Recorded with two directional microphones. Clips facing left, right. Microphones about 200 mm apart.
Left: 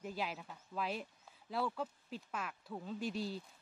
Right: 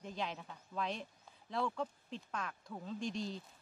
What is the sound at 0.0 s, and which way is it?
Speech, 5° left (ahead or behind).